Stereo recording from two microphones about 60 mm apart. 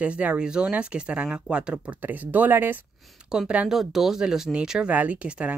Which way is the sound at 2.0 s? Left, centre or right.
Right.